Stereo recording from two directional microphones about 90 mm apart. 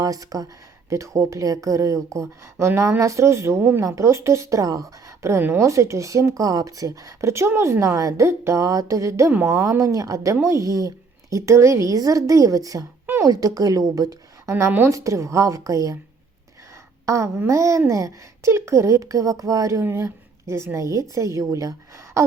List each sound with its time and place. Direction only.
0.0 s speech: 40° right (ahead or behind)
5.4 s a woman's voice: 20° right (ahead or behind)
5.6 s a woman's voice: 35° right (ahead or behind)
14.5 s a woman's voice: 25° right (ahead or behind); by 16.0 s 40° right (ahead or behind)
17.1 s speech: 30° right (ahead or behind)
19.8 s speech: 25° right (ahead or behind)